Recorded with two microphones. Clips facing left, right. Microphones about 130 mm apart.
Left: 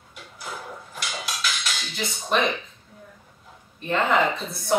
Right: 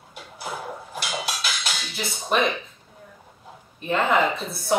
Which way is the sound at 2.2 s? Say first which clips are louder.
Right 1 dB; centre (ahead or behind).